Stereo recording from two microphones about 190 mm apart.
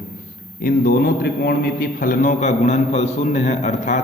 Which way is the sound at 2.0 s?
45° left (ahead or behind).